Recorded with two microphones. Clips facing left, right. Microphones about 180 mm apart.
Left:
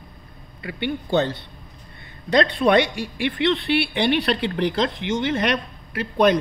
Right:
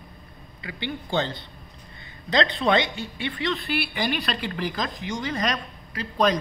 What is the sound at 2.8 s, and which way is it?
Speech, 75° left (ahead or behind).